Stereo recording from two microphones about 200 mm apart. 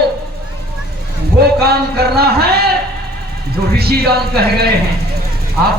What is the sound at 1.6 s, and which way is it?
Speech, 50° right (ahead or behind).